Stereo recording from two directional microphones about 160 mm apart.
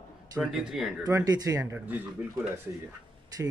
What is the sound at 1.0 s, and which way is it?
Speech, 20° right (ahead or behind).